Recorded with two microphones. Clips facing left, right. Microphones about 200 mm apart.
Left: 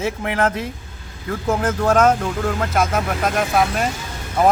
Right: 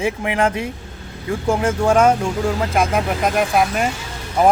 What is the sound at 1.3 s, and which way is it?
A man's voice, 10° right (ahead or behind).